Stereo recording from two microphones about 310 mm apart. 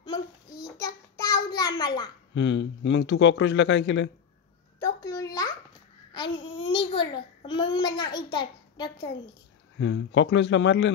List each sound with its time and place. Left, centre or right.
0.0 s child singing: centre
1.8 s a child's voice: centre
2.3 s speech: left
4.7 s a sound: centre
6.1 s a child's voice: centre
9.8 s speech: left